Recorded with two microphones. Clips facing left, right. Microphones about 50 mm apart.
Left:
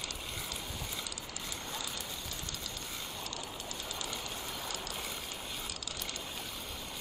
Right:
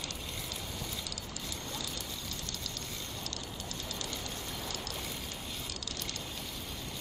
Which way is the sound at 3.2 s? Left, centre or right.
Centre.